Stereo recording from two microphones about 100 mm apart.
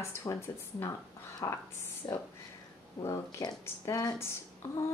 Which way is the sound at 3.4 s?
40° left (ahead or behind).